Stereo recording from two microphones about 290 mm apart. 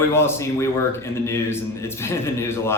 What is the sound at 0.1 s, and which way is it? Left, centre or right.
A man's voice, centre.